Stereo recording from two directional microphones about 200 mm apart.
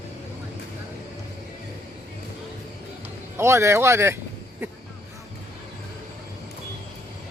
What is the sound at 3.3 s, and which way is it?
Speech, 15° right (ahead or behind).